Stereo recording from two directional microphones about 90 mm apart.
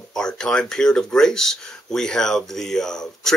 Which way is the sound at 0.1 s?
10° left (ahead or behind).